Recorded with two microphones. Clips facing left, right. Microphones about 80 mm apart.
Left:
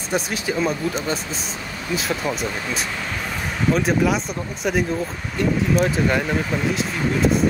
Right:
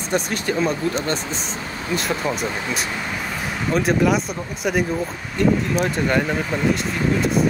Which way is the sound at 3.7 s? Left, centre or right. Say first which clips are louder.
Right 1 dB; centre.